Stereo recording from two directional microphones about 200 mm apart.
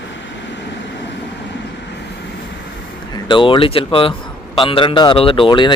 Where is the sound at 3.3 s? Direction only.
25° left (ahead or behind).